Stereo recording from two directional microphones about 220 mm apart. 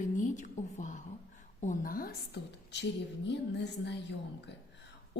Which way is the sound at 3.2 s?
55° left (ahead or behind).